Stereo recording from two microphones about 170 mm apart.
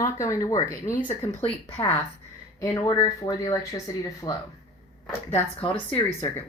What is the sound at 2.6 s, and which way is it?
Speech, 20° left (ahead or behind).